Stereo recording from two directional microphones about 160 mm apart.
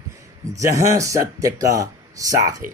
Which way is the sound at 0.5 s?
20° right (ahead or behind).